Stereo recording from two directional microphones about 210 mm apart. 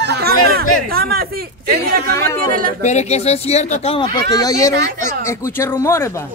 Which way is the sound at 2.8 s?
35° left (ahead or behind).